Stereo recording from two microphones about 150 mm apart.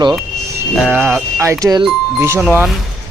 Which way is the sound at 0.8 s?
5° right (ahead or behind).